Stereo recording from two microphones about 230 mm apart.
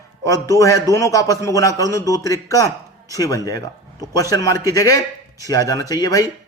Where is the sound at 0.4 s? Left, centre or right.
Centre.